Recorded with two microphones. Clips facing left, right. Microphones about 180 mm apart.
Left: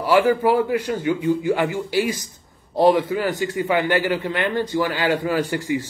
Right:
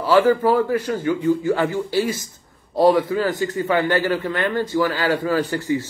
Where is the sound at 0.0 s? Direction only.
15° left (ahead or behind).